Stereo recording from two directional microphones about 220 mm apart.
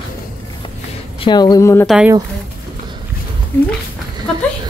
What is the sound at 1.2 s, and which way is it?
Speech, 20° left (ahead or behind).